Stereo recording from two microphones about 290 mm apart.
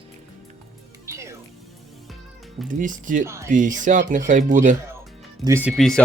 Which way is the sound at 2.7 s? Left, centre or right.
Right.